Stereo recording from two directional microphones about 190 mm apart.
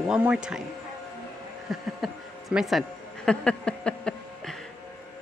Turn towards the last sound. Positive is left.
turn(degrees=5)  # may be behind; listen again after turning